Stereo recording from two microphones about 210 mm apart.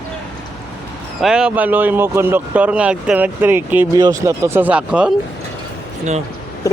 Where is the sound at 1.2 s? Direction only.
5° right (ahead or behind).